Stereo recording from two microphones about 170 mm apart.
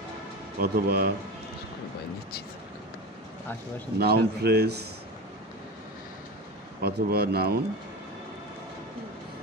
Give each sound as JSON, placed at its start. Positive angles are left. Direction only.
{"t": 0.6, "sound": "a man's voice", "side_deg": -65}
{"t": 4.0, "sound": "speech", "side_deg": -70}
{"t": 6.8, "sound": "speech", "side_deg": -65}